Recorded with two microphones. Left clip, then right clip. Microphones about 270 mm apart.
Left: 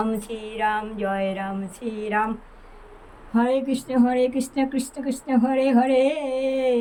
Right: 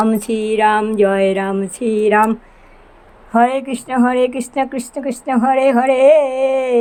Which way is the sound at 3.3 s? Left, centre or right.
Centre.